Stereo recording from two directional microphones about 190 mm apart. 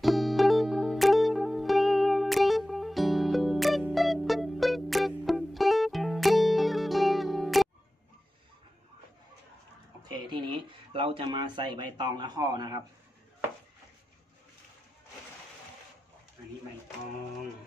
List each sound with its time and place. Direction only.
0.0 s music: centre (ahead or behind)
10.1 s speech: 25° right (ahead or behind)